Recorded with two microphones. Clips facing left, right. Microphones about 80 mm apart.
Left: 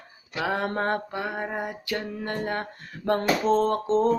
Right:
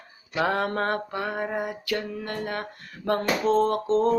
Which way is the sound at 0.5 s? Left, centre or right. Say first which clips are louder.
Even; left.